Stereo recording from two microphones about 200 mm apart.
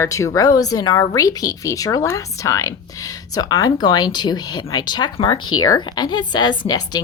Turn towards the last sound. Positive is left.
turn(degrees=20)  # may be behind; listen again after turning